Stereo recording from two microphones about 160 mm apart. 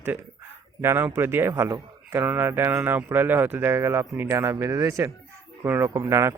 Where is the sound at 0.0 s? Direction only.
15° right (ahead or behind).